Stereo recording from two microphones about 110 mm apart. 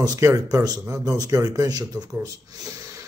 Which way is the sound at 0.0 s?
30° right (ahead or behind).